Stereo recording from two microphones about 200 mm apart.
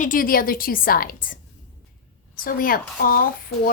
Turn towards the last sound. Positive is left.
turn(degrees=45)  # may be behind; listen again after turning